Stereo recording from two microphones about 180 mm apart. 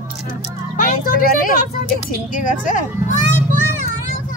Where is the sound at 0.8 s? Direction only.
50° left (ahead or behind).